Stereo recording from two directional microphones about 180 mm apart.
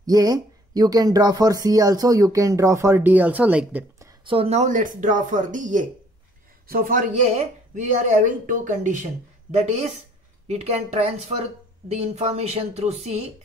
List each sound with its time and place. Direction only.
0.0 s speech: 20° right (ahead or behind)
4.2 s speech: 30° right (ahead or behind)